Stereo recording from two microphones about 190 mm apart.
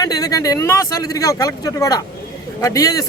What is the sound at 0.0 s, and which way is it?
A man's voice, 20° left (ahead or behind).